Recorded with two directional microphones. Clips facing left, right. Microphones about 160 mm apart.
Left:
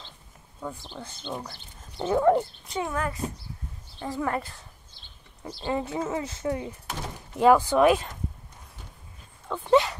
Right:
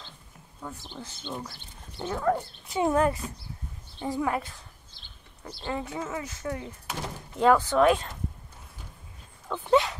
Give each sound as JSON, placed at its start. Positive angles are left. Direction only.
{"t": 0.6, "sound": "speech", "side_deg": 0}
{"t": 1.2, "sound": "speech", "side_deg": 15}
{"t": 2.8, "sound": "a woman's voice", "side_deg": -25}
{"t": 4.4, "sound": "speech", "side_deg": 0}
{"t": 5.7, "sound": "speech", "side_deg": 25}
{"t": 7.3, "sound": "speech", "side_deg": 10}
{"t": 9.5, "sound": "speech", "side_deg": 0}